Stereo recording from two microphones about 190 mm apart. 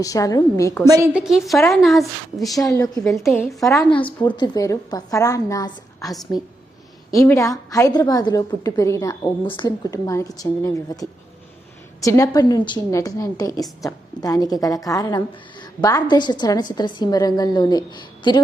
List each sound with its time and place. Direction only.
0.0 s a woman's voice: 20° left (ahead or behind)
0.9 s a woman's voice: 15° right (ahead or behind)
1.1 s a woman's voice: centre (ahead or behind)
3.6 s a woman's voice: 15° left (ahead or behind)